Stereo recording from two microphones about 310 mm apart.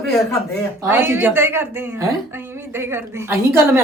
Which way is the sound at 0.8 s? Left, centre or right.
Centre.